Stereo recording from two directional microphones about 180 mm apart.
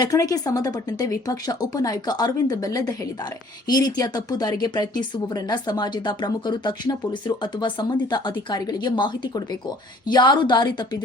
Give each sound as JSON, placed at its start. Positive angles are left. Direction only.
{"t": 0.0, "sound": "speech", "side_deg": 20}